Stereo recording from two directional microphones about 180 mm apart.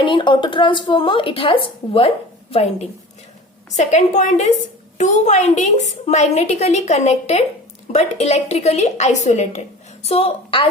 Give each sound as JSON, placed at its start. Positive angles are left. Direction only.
{"t": 0.0, "sound": "a woman's voice", "side_deg": 30}